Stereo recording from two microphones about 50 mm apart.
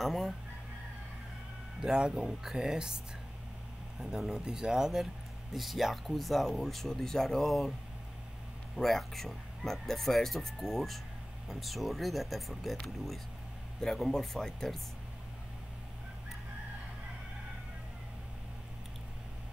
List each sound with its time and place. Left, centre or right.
0.0 s fowl: centre
1.8 s speech: centre
4.3 s speech: centre
8.7 s speech: centre